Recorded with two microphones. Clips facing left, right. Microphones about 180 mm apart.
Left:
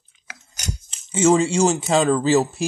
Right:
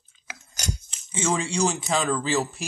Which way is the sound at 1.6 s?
25° left (ahead or behind).